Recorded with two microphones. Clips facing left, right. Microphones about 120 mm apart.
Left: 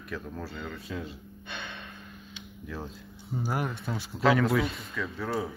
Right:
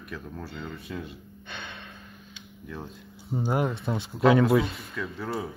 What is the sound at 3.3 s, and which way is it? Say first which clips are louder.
Speech: right 5 dB; 25° right (ahead or behind).